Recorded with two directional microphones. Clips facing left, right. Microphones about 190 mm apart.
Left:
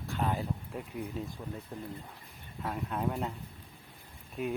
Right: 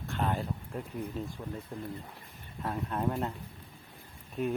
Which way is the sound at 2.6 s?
5° left (ahead or behind).